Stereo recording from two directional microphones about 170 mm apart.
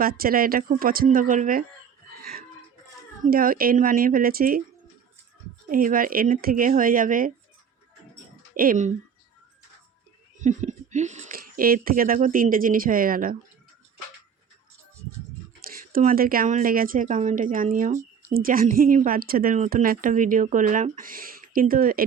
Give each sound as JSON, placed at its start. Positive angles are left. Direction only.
{"t": 0.0, "sound": "a woman's voice", "side_deg": -60}
{"t": 3.2, "sound": "a woman's voice", "side_deg": -55}
{"t": 5.6, "sound": "speech", "side_deg": -55}
{"t": 8.5, "sound": "speech", "side_deg": -55}
{"t": 10.3, "sound": "a woman's voice", "side_deg": -45}
{"t": 15.6, "sound": "a woman's voice", "side_deg": -55}